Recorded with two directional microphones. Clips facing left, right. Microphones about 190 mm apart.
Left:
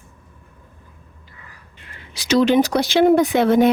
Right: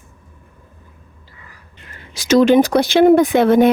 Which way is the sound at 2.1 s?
45° right (ahead or behind).